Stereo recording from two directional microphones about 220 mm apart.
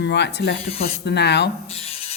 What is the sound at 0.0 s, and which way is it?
A man's voice, 50° left (ahead or behind).